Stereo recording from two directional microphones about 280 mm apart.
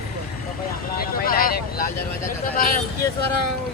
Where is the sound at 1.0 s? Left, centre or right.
Left.